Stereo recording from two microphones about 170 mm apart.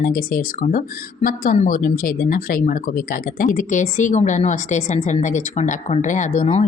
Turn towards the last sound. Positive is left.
turn(degrees=40)  # may be behind; listen again after turning